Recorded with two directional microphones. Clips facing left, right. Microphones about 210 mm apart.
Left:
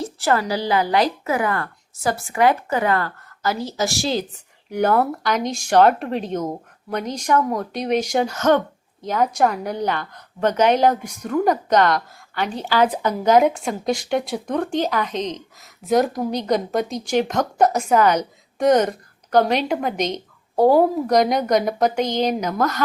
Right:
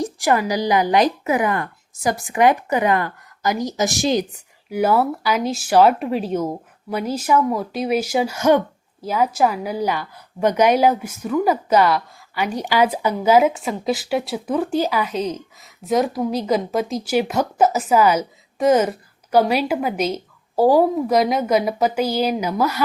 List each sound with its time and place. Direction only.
0.0 s speech: 15° right (ahead or behind)
4.7 s a woman's voice: 5° right (ahead or behind)